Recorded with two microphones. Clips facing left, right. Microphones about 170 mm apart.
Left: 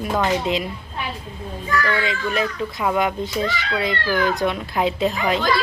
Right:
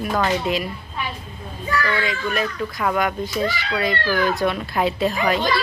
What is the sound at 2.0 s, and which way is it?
A woman's voice, 25° left (ahead or behind).